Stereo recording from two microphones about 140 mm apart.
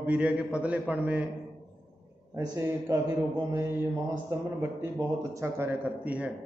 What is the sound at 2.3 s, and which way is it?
Speech, 20° right (ahead or behind).